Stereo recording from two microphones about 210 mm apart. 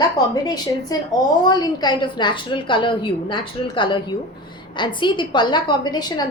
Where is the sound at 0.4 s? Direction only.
20° left (ahead or behind).